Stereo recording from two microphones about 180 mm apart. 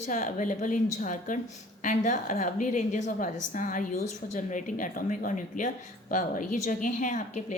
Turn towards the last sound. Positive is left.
turn(degrees=45)  # may be behind; listen again after turning